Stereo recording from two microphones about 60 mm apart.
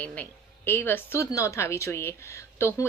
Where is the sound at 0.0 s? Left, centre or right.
Left.